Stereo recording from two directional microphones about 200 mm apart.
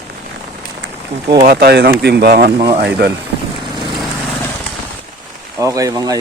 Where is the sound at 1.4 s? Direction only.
50° right (ahead or behind).